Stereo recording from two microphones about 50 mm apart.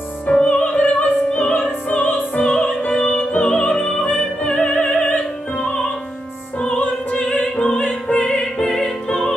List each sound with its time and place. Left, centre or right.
0.3 s music: left
4.6 s opera: centre
6.8 s music: left; by 9.3 s centre